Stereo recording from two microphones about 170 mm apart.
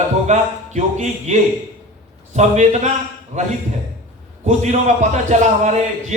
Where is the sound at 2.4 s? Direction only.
45° right (ahead or behind).